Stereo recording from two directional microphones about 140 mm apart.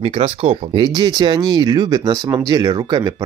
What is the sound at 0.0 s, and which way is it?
Speech, 45° right (ahead or behind).